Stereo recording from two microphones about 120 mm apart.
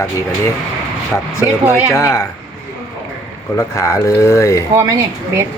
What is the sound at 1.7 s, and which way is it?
Speech, 25° left (ahead or behind).